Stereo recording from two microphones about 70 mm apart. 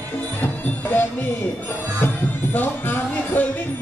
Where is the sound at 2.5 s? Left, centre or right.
Left.